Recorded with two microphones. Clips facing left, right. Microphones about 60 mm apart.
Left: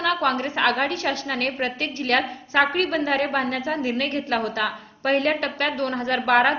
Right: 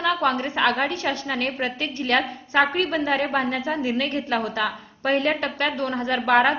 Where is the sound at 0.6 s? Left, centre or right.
Centre.